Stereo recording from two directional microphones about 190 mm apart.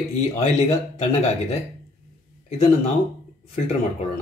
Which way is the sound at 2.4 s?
35° left (ahead or behind).